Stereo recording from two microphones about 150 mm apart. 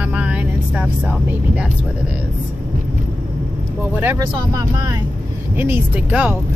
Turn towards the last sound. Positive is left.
turn(degrees=-10)  # may be behind; listen again after turning